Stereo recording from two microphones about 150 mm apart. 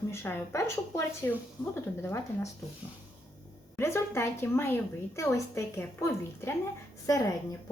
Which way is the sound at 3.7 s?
15° left (ahead or behind).